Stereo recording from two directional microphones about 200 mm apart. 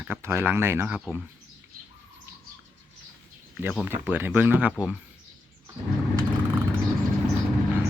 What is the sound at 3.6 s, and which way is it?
Speech, 5° right (ahead or behind).